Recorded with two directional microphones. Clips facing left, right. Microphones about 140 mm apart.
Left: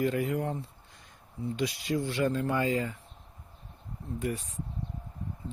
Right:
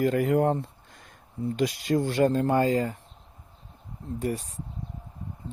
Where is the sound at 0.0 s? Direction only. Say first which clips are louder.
Right 6 dB; 45° right (ahead or behind).